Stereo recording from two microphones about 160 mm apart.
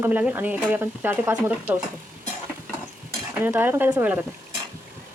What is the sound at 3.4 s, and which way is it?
Speech, 15° right (ahead or behind).